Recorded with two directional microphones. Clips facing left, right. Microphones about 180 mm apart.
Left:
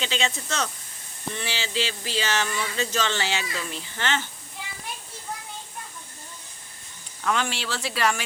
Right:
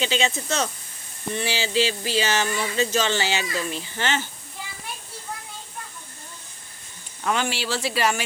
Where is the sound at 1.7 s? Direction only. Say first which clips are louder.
Right 6 dB; 10° right (ahead or behind).